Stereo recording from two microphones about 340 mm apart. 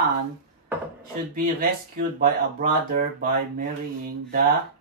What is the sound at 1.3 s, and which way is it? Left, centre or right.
Speech, right.